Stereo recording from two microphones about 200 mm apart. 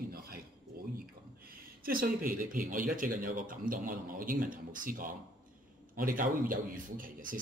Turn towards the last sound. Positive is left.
turn(degrees=-45)  # may be behind; listen again after turning